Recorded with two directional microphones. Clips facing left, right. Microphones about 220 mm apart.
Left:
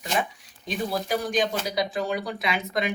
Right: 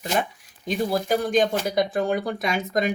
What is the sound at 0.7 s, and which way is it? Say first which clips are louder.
Speech: right 4 dB; 50° right (ahead or behind).